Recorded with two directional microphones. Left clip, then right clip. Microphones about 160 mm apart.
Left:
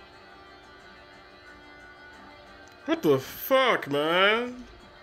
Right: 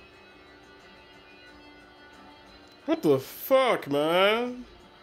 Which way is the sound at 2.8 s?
5° right (ahead or behind).